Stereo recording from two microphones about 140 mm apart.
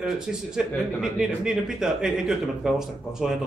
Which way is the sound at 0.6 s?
5° right (ahead or behind).